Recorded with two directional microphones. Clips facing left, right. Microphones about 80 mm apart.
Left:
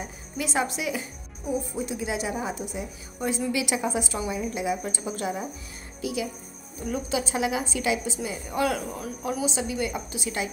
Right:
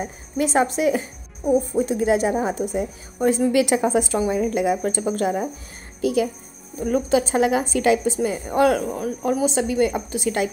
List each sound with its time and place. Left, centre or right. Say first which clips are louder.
0.0 s a woman's voice: right 9 dB; right